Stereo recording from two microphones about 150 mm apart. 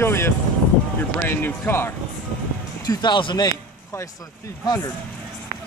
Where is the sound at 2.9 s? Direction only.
30° left (ahead or behind).